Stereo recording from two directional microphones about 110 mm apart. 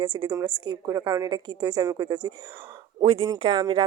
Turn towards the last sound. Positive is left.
turn(degrees=-55)  # may be behind; listen again after turning